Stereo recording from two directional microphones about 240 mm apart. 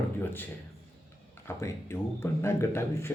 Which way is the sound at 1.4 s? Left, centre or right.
Centre.